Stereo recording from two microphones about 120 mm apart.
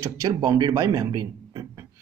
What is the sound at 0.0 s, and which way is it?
Speech, 35° right (ahead or behind).